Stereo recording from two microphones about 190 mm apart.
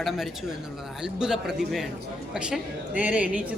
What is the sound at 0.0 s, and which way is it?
A woman's voice, centre (ahead or behind).